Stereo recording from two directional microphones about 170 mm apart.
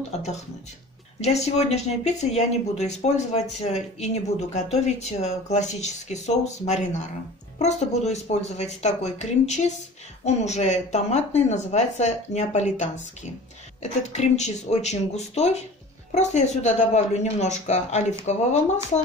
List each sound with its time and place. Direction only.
0.1 s speech: 40° left (ahead or behind)